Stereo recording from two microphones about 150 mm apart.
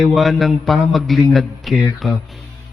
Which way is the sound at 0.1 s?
Centre (ahead or behind).